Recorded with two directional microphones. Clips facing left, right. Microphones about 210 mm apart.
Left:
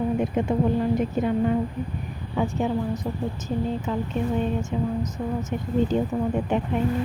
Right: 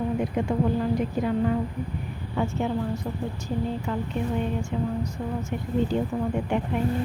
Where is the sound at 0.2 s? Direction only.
25° left (ahead or behind).